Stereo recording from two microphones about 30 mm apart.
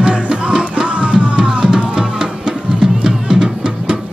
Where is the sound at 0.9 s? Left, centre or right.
Right.